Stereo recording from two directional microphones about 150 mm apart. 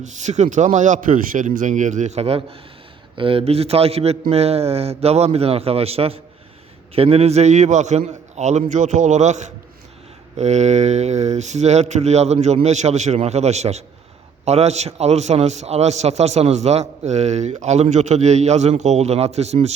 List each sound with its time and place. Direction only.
0.0 s a man's voice: 50° right (ahead or behind)